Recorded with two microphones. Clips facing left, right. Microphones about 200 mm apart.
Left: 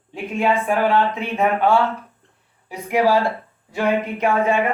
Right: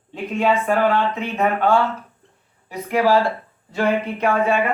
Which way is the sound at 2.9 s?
15° left (ahead or behind).